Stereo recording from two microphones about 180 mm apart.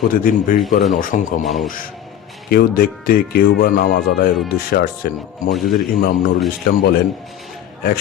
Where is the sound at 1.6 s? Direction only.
50° left (ahead or behind).